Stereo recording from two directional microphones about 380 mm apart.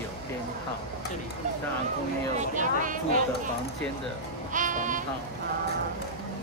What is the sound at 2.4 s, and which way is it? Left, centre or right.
Speech, centre.